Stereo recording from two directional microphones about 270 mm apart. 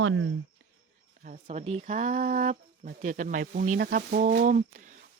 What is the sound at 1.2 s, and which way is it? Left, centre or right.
Speech, right.